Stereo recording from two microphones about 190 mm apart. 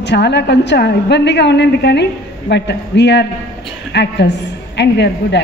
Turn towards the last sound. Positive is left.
turn(degrees=60)  # may be behind; listen again after turning